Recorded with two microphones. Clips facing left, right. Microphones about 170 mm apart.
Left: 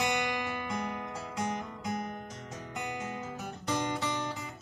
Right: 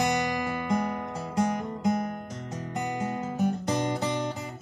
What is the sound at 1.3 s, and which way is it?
Music, 45° right (ahead or behind).